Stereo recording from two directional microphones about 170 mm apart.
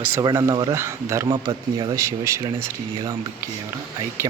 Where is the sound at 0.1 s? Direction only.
20° right (ahead or behind).